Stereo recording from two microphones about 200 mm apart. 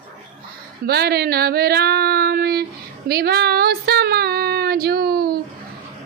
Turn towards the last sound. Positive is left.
turn(degrees=-50)  # may be behind; listen again after turning